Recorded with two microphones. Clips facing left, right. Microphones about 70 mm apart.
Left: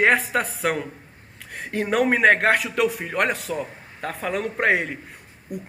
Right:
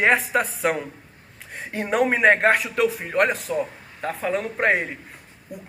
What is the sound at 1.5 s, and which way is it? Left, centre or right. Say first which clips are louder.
A man's voice: left 1 dB; left.